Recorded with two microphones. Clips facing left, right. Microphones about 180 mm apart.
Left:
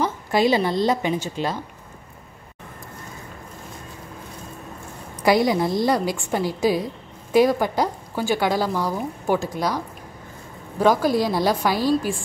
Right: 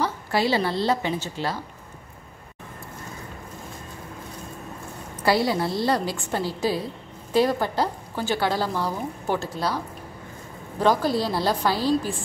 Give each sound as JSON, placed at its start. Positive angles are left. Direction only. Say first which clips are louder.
{"t": 0.0, "sound": "a woman's voice", "louder": "left 4 dB", "side_deg": 20}
{"t": 5.2, "sound": "a woman's voice", "louder": "left 4 dB", "side_deg": 15}
{"t": 10.8, "sound": "a woman's voice", "louder": "left 3 dB", "side_deg": 10}